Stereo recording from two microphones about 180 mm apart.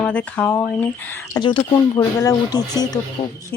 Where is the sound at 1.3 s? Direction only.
25° left (ahead or behind).